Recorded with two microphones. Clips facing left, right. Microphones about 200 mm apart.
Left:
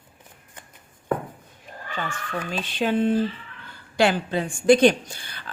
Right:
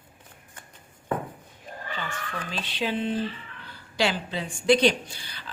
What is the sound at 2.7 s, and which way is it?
A woman's voice, 50° left (ahead or behind).